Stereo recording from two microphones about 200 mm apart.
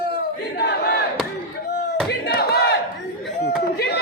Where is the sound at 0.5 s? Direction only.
55° left (ahead or behind).